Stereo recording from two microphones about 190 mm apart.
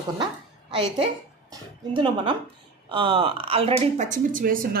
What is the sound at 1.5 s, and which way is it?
A woman's voice, 25° right (ahead or behind).